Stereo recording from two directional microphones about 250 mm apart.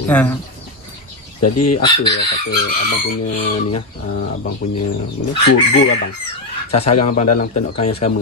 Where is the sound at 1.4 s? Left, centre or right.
Left.